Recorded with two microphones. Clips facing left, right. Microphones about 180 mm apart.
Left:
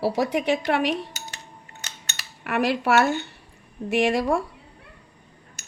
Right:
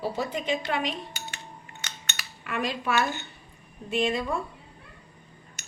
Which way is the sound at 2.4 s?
70° left (ahead or behind).